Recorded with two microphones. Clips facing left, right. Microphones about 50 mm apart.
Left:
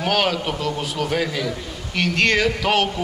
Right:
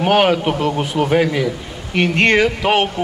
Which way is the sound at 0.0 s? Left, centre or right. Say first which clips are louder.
Right 7 dB; right.